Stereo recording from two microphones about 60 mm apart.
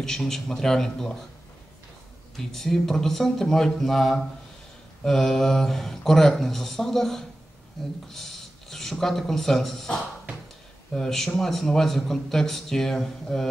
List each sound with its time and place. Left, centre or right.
0.0 s a man's voice: centre
2.3 s a man's voice: centre